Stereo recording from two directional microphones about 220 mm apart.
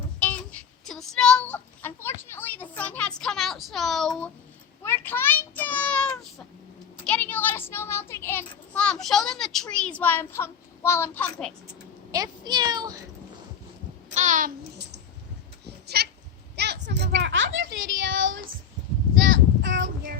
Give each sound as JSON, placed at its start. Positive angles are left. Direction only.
{"t": 0.9, "sound": "a sound", "side_deg": 0}
{"t": 4.8, "sound": "child singing", "side_deg": 10}
{"t": 7.0, "sound": "a child's voice", "side_deg": 5}
{"t": 12.1, "sound": "speech", "side_deg": -20}
{"t": 14.1, "sound": "a sound", "side_deg": -35}
{"t": 15.9, "sound": "goat", "side_deg": -45}
{"t": 16.6, "sound": "a sound", "side_deg": -50}
{"t": 17.2, "sound": "a woman's voice", "side_deg": -60}
{"t": 19.3, "sound": "child singing", "side_deg": -55}